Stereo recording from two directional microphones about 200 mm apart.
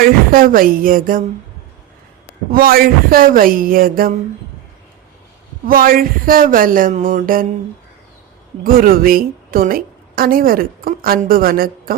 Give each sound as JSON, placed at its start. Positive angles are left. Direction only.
{"t": 0.0, "sound": "a woman's voice", "side_deg": -45}
{"t": 2.5, "sound": "a woman's voice", "side_deg": -50}
{"t": 5.6, "sound": "a woman's voice", "side_deg": -45}
{"t": 8.6, "sound": "a woman's voice", "side_deg": -45}